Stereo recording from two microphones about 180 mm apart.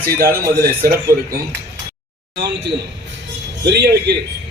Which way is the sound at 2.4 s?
70° right (ahead or behind).